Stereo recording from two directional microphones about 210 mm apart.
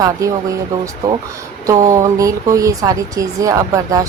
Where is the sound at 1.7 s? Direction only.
15° right (ahead or behind).